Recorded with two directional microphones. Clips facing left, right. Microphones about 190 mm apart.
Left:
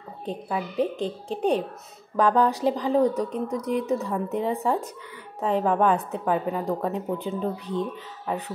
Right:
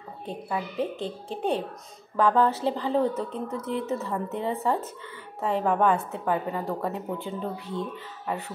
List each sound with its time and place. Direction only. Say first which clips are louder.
0.3 s a woman's voice: left 2 dB; 15° left (ahead or behind)